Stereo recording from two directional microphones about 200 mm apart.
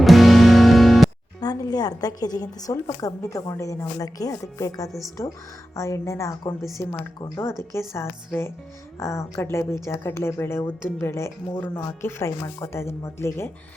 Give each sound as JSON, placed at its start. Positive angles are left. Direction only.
{"t": 0.0, "sound": "music", "side_deg": 0}
{"t": 1.4, "sound": "a woman's voice", "side_deg": 20}
{"t": 4.9, "sound": "speech", "side_deg": 0}
{"t": 5.7, "sound": "a woman's voice", "side_deg": 15}